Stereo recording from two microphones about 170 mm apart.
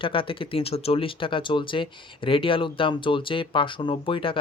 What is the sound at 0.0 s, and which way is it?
Speech, 30° left (ahead or behind).